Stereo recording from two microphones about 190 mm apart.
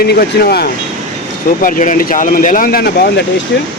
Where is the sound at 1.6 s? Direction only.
45° left (ahead or behind).